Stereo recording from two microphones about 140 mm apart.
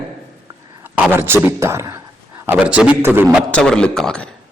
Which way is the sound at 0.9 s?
15° right (ahead or behind).